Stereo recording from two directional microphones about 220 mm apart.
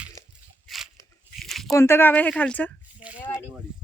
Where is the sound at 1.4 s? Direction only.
Centre (ahead or behind).